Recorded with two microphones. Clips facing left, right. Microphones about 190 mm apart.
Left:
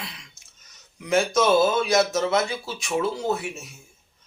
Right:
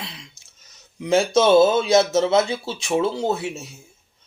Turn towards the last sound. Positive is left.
turn(degrees=-25)  # may be behind; listen again after turning